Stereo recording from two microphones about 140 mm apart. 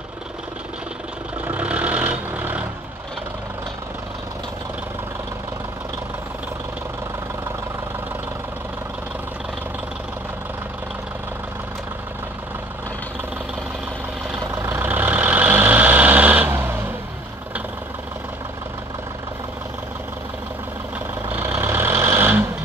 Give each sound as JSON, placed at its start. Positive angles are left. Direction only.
{"t": 1.4, "sound": "vehicle", "side_deg": -10}
{"t": 14.5, "sound": "vehicle", "side_deg": -15}
{"t": 21.3, "sound": "vehicle", "side_deg": -15}